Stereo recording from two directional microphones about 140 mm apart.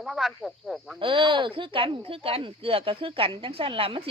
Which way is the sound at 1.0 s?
35° right (ahead or behind).